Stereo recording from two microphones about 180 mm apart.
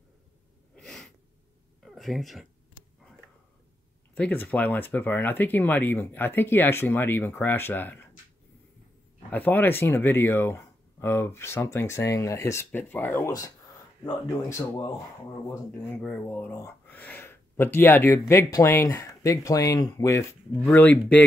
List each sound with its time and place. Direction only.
0.7 s sneeze: 5° left (ahead or behind)
1.8 s a sound: centre (ahead or behind)
4.1 s speech: 10° left (ahead or behind)
9.3 s speech: 10° left (ahead or behind)